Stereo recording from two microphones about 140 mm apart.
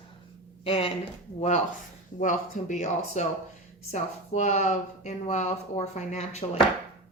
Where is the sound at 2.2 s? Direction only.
65° left (ahead or behind).